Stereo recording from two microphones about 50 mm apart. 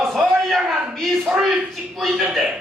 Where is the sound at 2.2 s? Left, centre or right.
Centre.